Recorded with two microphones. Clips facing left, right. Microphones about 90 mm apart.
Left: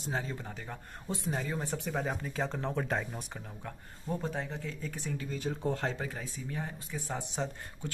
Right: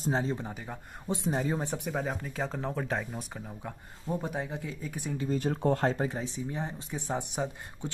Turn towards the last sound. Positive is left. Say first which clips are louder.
# right 3 dB
turn(degrees=-15)  # may be behind; listen again after turning